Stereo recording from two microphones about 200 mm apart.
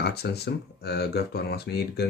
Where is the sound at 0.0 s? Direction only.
55° left (ahead or behind).